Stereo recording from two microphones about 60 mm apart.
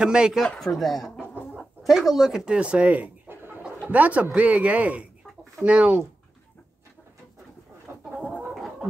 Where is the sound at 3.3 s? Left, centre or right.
Right.